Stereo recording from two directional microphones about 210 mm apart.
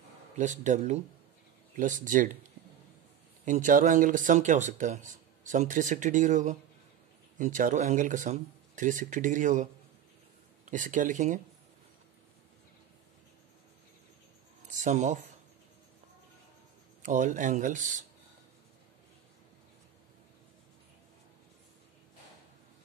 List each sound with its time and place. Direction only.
0.4 s speech: 35° right (ahead or behind)
3.4 s speech: 35° right (ahead or behind)
14.7 s speech: 35° right (ahead or behind)
17.0 s speech: 35° right (ahead or behind)